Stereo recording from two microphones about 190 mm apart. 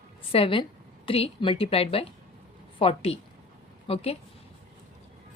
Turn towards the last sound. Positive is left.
turn(degrees=30)  # may be behind; listen again after turning